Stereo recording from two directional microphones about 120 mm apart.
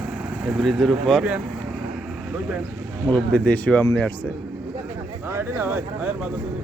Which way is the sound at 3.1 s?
10° left (ahead or behind).